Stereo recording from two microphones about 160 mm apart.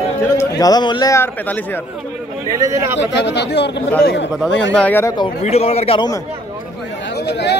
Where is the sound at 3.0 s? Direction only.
90° left.